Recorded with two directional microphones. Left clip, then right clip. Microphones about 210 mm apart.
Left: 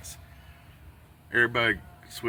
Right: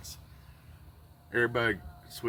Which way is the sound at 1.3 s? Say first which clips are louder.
Left 4 dB; 5° left (ahead or behind).